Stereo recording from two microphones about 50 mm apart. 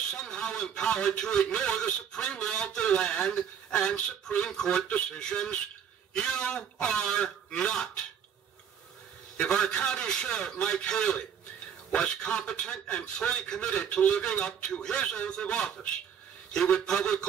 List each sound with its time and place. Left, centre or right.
0.1 s a man's voice: centre
9.4 s a man's voice: centre